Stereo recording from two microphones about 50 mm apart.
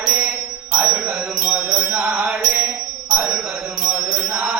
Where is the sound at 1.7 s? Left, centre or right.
Right.